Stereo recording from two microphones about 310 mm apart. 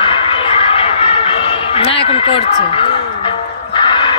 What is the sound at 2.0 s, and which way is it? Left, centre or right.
Speech, centre.